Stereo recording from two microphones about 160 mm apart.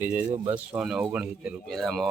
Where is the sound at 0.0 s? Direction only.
10° right (ahead or behind).